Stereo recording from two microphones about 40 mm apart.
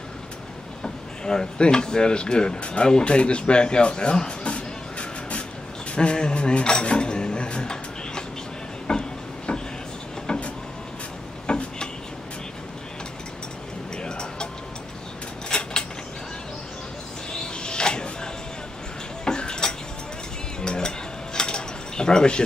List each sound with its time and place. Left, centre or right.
0.8 s speech: centre
8.9 s a sound: left
10.2 s vehicle: left
11.4 s a sound: left
14.0 s music: centre
15.5 s mechanisms: centre
17.3 s music: left
19.2 s dishes: left
20.6 s cutlery: centre